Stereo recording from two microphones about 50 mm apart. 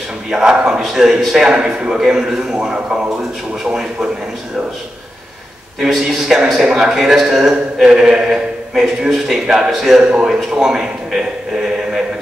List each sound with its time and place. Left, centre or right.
0.3 s a man's voice: centre
5.8 s a man's voice: centre